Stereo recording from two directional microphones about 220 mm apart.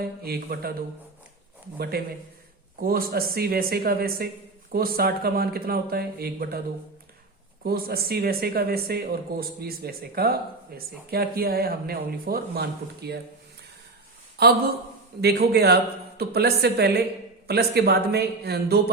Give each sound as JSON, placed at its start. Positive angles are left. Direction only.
{"t": 0.0, "sound": "speech", "side_deg": -45}
{"t": 1.9, "sound": "speech", "side_deg": -45}
{"t": 7.6, "sound": "speech", "side_deg": -45}
{"t": 14.4, "sound": "speech", "side_deg": -45}